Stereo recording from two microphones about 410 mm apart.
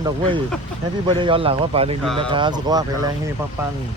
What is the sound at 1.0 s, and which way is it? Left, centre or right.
Speech, centre.